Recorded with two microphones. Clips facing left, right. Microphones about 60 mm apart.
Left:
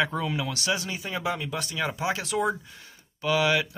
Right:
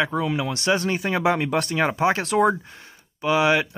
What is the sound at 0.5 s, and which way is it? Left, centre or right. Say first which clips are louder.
Speech: right 7 dB; right.